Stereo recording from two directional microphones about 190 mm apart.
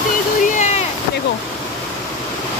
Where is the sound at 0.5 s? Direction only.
40° left (ahead or behind).